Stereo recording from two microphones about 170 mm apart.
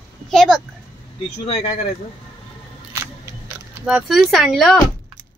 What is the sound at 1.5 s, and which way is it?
Speech, 40° left (ahead or behind).